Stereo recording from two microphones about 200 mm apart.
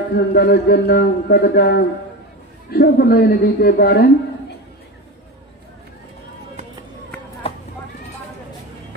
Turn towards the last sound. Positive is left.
turn(degrees=30)  # may be behind; listen again after turning